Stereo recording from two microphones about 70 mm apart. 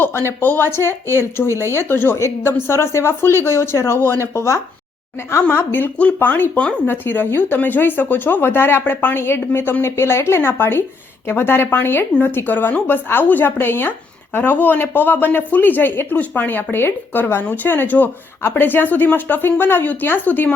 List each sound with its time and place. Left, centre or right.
0.0 s speech: left
5.5 s speech: left